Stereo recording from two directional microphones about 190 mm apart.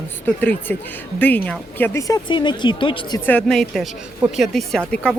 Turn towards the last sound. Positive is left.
turn(degrees=5)  # may be behind; listen again after turning